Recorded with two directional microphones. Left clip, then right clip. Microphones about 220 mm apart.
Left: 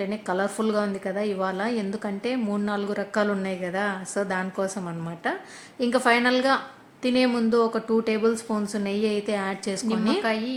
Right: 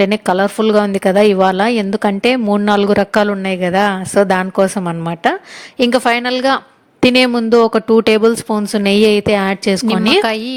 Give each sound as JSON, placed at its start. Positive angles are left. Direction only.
{"t": 0.0, "sound": "a woman's voice", "side_deg": -40}